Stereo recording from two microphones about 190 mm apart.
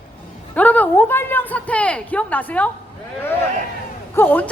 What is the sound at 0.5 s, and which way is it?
A woman's voice, 10° left (ahead or behind).